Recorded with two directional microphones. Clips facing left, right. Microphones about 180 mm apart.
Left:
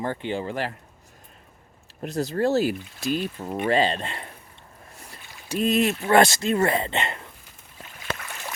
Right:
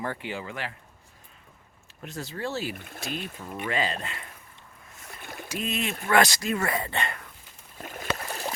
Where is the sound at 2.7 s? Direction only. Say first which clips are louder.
Left 8 dB; 55° right (ahead or behind).